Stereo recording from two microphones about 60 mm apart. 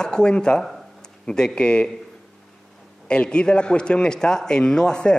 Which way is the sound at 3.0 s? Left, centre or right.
Centre.